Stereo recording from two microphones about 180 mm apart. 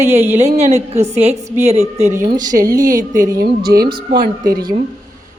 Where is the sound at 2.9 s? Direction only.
50° right (ahead or behind).